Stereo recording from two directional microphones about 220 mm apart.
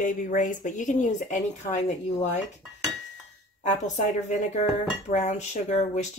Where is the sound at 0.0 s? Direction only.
35° left (ahead or behind).